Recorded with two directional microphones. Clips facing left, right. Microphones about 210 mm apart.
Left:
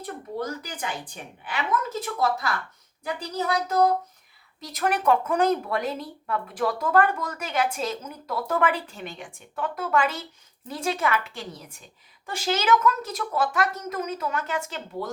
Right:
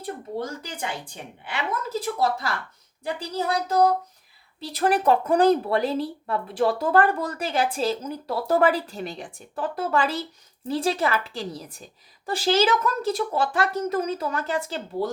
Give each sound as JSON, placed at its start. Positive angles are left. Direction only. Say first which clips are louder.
{"t": 0.0, "sound": "a woman's voice", "louder": "right 1 dB", "side_deg": -30}
{"t": 3.1, "sound": "a woman's voice", "louder": "right 1 dB", "side_deg": -30}